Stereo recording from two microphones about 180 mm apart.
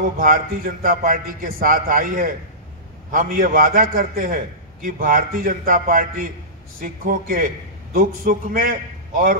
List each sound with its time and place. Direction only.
0.2 s a man's voice: 55° right (ahead or behind)